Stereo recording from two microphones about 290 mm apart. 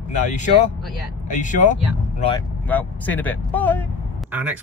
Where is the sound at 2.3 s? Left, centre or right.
Centre.